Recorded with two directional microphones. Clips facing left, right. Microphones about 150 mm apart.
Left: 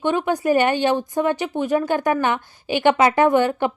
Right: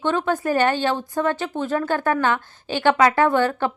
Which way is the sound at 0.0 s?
15° left (ahead or behind).